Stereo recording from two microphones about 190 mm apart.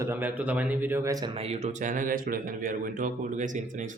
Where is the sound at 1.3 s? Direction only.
35° right (ahead or behind).